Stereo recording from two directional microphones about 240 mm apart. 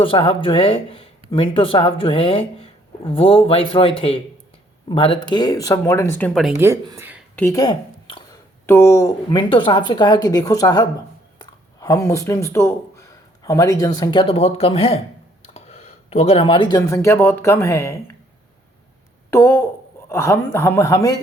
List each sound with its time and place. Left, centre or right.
0.0 s speech: left; by 6.5 s centre
6.6 s speech: centre
7.3 s a woman's voice: centre
19.3 s speech: centre